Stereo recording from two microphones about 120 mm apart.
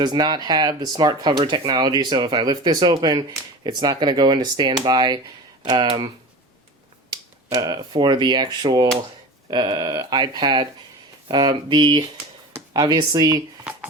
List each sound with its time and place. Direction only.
0.0 s speech: 35° right (ahead or behind)
7.5 s speech: 35° right (ahead or behind)